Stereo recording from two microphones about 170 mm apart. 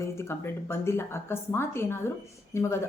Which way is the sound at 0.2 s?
15° left (ahead or behind).